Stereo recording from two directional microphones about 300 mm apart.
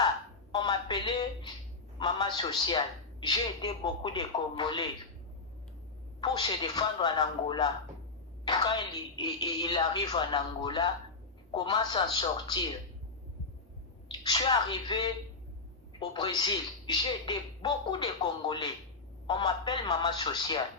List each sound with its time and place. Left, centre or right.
0.5 s a sound: centre
2.0 s a man's voice: centre
6.1 s a man's voice: centre
14.1 s a man's voice: centre